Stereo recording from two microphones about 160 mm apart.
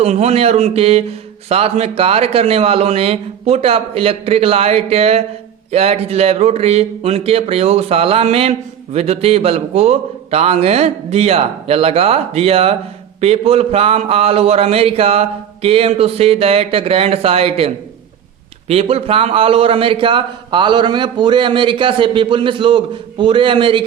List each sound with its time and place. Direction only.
0.0 s speech: 40° right (ahead or behind)
18.7 s speech: 40° right (ahead or behind)